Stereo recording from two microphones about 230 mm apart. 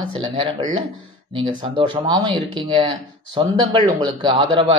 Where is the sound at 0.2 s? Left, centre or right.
Right.